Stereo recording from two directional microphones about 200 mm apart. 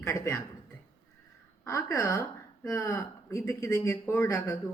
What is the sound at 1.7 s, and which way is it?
A woman's voice, 15° left (ahead or behind).